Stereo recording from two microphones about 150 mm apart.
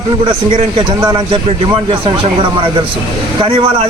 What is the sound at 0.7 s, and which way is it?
A man's voice, 30° right (ahead or behind).